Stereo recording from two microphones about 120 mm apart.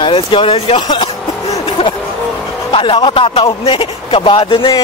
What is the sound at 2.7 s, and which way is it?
Speech, 45° left (ahead or behind).